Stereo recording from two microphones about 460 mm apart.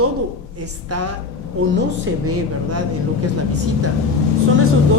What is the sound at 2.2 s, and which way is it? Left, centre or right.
Speech, right.